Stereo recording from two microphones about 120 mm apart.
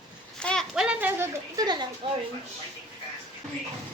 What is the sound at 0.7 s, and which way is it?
Speech, 10° right (ahead or behind).